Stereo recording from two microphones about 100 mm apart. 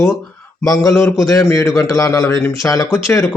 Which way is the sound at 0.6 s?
35° left (ahead or behind).